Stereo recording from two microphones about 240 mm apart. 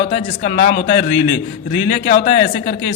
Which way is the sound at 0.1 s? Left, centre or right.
Left.